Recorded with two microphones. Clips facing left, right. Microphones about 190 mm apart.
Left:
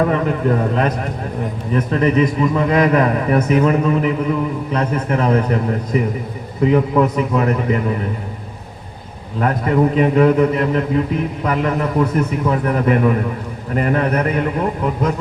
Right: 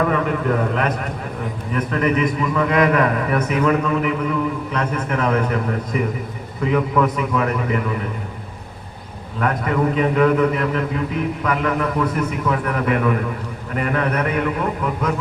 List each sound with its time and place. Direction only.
0.0 s a man's voice: 30° left (ahead or behind)
9.4 s a man's voice: 30° left (ahead or behind)